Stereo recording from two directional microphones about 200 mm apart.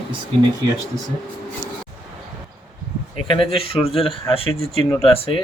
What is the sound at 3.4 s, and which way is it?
Speech, 30° left (ahead or behind).